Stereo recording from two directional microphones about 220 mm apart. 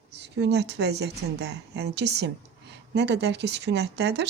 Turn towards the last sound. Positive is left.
turn(degrees=-50)  # may be behind; listen again after turning